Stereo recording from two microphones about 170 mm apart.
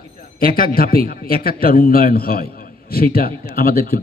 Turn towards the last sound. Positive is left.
turn(degrees=60)  # may be behind; listen again after turning